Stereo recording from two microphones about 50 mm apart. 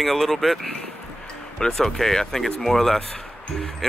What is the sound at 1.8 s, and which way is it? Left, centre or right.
Speech, centre.